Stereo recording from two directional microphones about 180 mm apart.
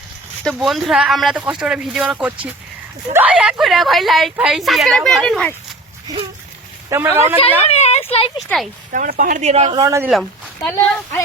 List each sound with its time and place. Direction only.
0.4 s speech: centre (ahead or behind)
6.9 s speech: 10° right (ahead or behind)
7.7 s a sound: 35° left (ahead or behind)
8.4 s speech: centre (ahead or behind)
8.9 s speech: 50° right (ahead or behind)
9.7 s speech: 20° right (ahead or behind)
10.1 s speech: centre (ahead or behind)
10.7 s speech: 10° left (ahead or behind)